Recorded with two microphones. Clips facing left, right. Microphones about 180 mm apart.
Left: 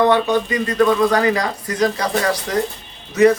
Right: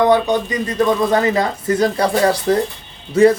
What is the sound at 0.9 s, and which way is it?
Speech, 25° right (ahead or behind).